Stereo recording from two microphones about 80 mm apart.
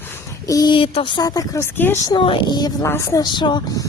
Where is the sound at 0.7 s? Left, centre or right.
Left.